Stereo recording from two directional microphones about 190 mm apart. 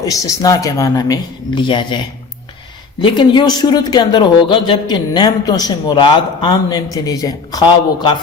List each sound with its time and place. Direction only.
0.0 s speech: 20° left (ahead or behind)